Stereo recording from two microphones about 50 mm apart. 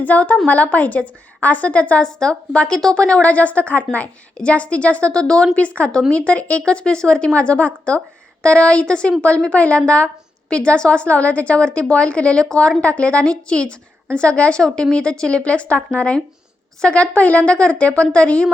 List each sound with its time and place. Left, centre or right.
0.0 s a woman's voice: left
2.1 s a woman's voice: centre
5.5 s a woman's voice: left